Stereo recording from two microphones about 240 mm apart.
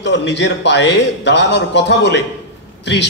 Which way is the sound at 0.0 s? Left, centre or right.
Left.